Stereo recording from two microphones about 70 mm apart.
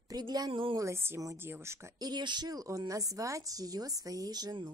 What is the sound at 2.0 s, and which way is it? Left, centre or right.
A woman's voice, right.